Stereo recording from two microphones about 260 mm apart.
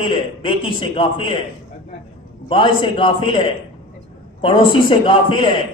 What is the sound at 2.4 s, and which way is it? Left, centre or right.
A man's voice, centre.